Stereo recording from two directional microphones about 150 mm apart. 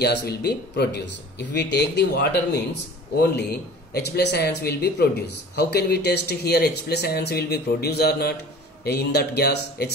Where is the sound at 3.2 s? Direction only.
90° left.